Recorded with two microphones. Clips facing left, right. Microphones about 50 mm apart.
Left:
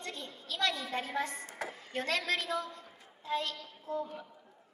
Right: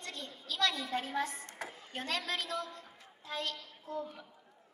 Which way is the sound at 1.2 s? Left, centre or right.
Left.